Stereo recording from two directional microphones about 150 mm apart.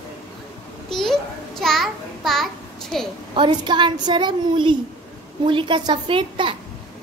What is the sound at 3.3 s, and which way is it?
A child's voice, 30° right (ahead or behind).